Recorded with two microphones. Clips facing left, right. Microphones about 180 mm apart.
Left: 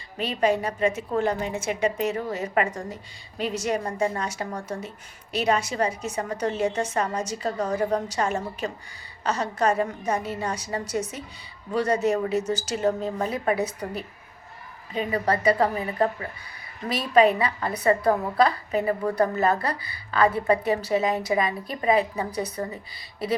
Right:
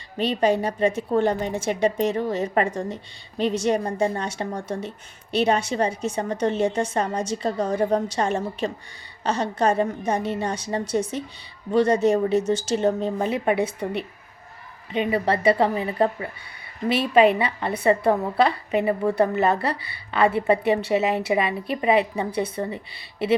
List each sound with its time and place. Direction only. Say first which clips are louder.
0.2 s a woman's voice: right 3 dB; 30° right (ahead or behind)
15.1 s a woman's voice: right 2 dB; 30° right (ahead or behind)